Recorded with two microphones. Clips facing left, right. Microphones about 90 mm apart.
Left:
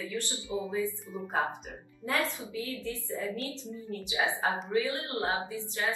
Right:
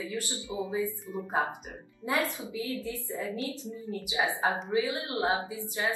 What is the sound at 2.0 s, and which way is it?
A woman's voice, 20° right (ahead or behind).